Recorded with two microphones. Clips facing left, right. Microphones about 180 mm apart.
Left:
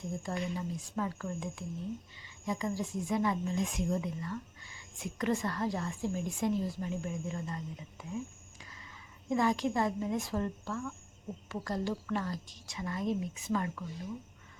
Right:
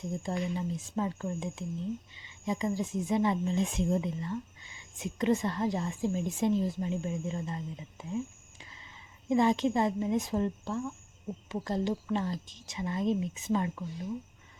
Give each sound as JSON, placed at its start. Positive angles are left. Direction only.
{"t": 0.0, "sound": "speech", "side_deg": -20}
{"t": 9.3, "sound": "speech", "side_deg": -20}